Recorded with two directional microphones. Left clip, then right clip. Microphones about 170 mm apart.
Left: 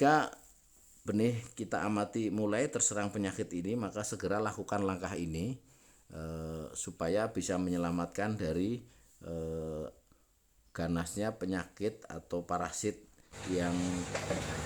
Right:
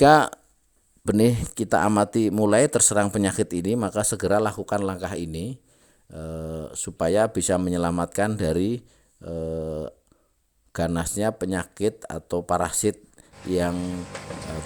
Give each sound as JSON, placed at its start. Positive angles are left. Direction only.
{"t": 0.0, "sound": "speech", "side_deg": -45}